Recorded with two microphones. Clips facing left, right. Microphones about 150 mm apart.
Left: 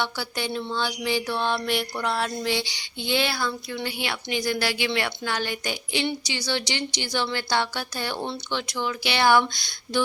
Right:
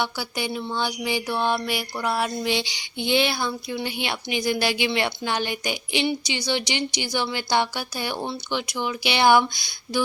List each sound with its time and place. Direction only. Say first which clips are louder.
0.0 s a woman's voice: right 1 dB; 10° right (ahead or behind)